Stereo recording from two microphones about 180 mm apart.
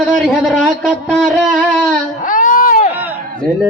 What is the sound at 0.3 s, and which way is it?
Speech, 5° left (ahead or behind).